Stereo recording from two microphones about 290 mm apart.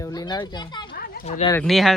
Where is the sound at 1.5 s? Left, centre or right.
Centre.